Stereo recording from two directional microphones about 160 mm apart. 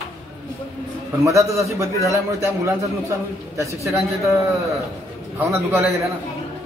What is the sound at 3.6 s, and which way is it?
Speech, 20° right (ahead or behind).